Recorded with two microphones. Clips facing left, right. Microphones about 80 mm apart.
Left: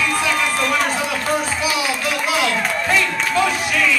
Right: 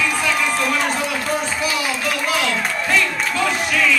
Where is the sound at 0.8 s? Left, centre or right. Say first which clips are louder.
Left 1 dB; centre.